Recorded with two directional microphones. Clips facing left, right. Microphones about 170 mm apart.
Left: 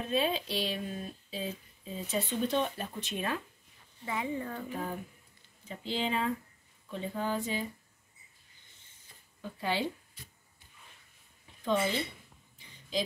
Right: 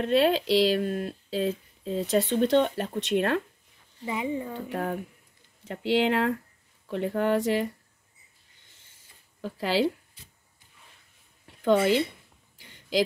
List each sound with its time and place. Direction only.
0.0 s speech: 80° right
4.0 s speech: 20° right (ahead or behind)
4.6 s speech: 65° right (ahead or behind)
5.6 s speech: 85° right
9.4 s speech: 90° right
11.6 s speech: 85° right
12.5 s a sound: 90° right